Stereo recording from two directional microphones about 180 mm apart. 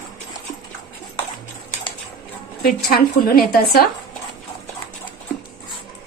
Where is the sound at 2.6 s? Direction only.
60° left (ahead or behind).